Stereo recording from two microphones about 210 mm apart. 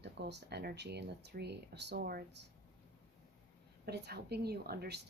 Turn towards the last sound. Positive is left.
turn(degrees=-50)  # may be behind; listen again after turning